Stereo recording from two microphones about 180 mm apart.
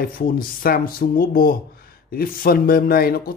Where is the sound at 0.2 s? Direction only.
55° left (ahead or behind).